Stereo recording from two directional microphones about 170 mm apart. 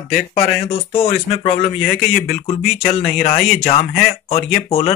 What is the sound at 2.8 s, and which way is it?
Speech, 40° left (ahead or behind).